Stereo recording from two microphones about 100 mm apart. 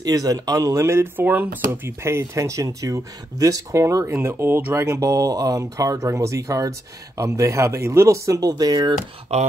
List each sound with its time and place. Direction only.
0.0 s speech: 40° right (ahead or behind)